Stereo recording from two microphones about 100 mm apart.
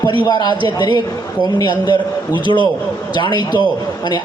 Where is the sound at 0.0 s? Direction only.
50° left (ahead or behind).